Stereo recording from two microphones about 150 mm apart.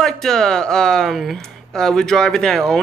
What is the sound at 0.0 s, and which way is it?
Speech, 5° left (ahead or behind).